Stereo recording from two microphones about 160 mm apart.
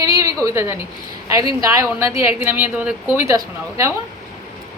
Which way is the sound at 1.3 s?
20° right (ahead or behind).